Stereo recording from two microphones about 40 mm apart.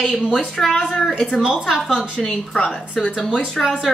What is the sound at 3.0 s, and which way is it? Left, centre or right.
Speech, centre.